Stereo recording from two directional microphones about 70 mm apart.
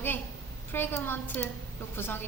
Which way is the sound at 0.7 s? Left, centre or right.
Left.